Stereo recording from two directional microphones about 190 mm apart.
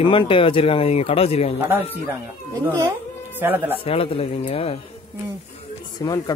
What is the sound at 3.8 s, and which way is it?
Speech, 30° left (ahead or behind).